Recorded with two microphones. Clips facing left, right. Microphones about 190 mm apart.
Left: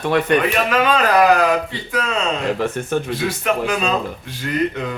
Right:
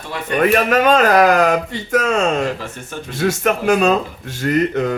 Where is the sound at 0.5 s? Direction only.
45° right (ahead or behind).